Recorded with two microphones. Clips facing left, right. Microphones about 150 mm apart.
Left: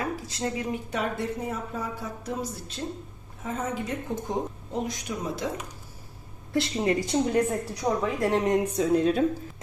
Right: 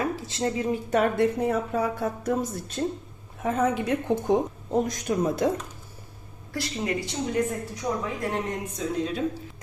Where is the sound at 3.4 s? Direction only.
70° right (ahead or behind).